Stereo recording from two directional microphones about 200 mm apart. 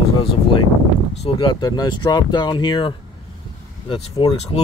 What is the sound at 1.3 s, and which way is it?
Speech, 25° left (ahead or behind).